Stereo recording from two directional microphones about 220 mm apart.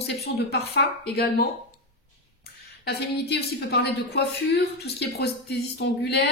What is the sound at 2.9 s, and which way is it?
Speech, 45° left (ahead or behind).